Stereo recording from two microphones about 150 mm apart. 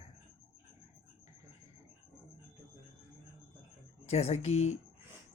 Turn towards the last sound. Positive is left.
turn(degrees=45)  # may be behind; listen again after turning